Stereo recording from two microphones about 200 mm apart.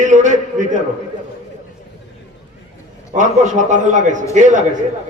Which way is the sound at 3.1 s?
35° right (ahead or behind).